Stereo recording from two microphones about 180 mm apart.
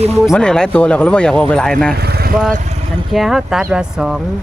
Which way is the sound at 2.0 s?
60° right (ahead or behind).